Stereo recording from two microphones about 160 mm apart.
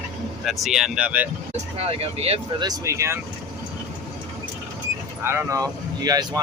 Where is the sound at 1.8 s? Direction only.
40° right (ahead or behind).